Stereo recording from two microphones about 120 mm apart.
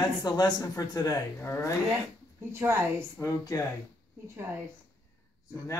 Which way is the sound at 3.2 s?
25° left (ahead or behind).